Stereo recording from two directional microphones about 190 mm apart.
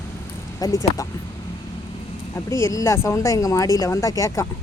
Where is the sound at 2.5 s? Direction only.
15° left (ahead or behind).